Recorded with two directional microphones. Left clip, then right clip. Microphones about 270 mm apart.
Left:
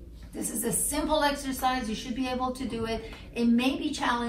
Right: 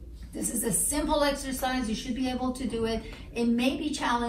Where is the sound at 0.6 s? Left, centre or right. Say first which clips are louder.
Even; centre.